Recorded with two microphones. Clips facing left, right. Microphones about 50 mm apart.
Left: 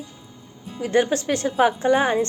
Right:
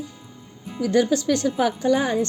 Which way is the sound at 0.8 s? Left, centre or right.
Left.